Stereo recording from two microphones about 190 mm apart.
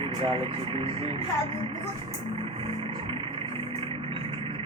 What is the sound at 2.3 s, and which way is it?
Vehicle, 30° right (ahead or behind).